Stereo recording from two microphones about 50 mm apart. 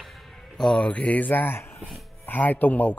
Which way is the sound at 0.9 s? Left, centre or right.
Left.